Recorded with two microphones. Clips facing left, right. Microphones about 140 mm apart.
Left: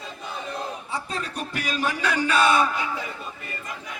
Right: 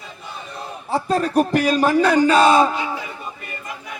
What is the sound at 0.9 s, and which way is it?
Speech, 55° right (ahead or behind).